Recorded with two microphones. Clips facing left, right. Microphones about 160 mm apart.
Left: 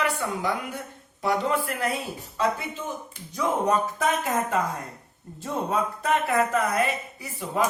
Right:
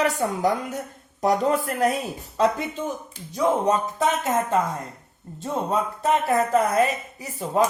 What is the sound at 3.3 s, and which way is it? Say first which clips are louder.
Speech: right 3 dB; 25° right (ahead or behind).